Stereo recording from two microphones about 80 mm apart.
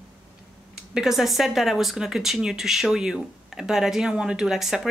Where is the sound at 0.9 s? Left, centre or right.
Centre.